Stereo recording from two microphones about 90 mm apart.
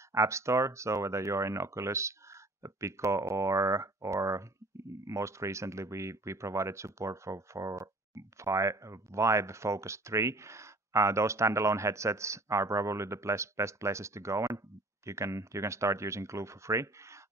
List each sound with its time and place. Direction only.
0.1 s speech: 35° right (ahead or behind)